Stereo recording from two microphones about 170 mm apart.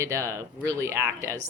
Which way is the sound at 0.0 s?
15° right (ahead or behind).